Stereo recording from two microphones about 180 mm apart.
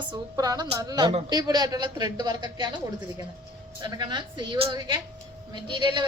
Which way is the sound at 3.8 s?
25° right (ahead or behind).